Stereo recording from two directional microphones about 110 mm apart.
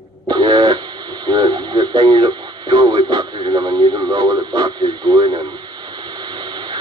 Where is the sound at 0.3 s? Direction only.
45° right (ahead or behind).